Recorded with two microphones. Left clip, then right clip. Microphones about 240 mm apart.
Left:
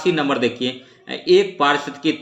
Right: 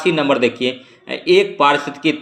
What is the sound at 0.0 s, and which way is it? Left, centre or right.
Speech, centre.